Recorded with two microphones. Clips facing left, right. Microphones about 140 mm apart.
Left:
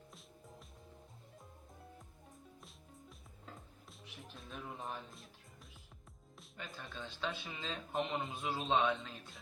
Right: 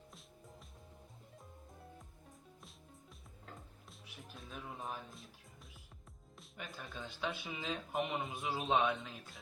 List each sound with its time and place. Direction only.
4.0 s speech: centre (ahead or behind)
6.6 s speech: 5° right (ahead or behind)
7.0 s a man's voice: 15° right (ahead or behind)